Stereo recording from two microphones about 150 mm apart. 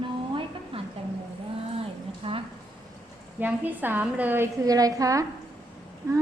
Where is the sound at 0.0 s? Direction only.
35° right (ahead or behind).